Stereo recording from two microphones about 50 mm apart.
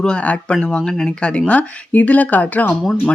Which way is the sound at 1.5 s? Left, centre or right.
Left.